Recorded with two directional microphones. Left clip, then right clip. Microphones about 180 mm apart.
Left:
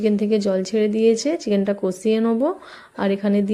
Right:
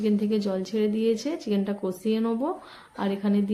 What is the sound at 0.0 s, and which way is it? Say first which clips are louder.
Speech: left 7 dB; 30° left (ahead or behind).